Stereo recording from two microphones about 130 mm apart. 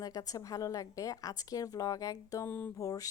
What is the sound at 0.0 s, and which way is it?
Speech, 25° left (ahead or behind).